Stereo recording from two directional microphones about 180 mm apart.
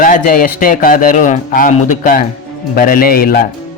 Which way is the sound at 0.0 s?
50° left (ahead or behind).